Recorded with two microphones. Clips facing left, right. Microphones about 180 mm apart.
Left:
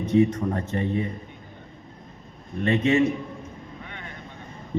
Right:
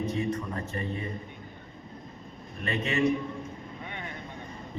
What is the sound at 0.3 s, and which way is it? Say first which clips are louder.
Speech: left 7 dB; 65° left (ahead or behind).